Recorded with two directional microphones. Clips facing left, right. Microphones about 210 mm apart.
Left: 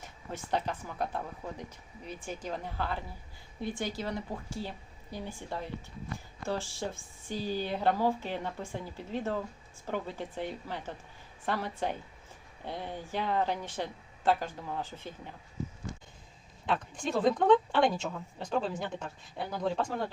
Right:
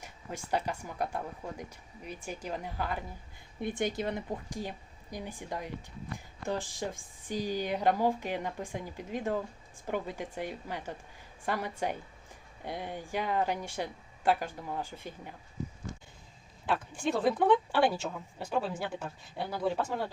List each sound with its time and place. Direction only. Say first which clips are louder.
0.0 s speech: even; 10° right (ahead or behind)
16.6 s speech: right 1 dB; 5° right (ahead or behind)